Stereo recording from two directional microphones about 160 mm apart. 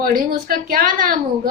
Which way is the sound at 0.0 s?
65° right (ahead or behind).